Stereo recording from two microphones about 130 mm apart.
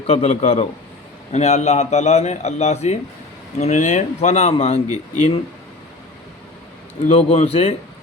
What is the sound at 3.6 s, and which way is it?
A man's voice, 70° left (ahead or behind).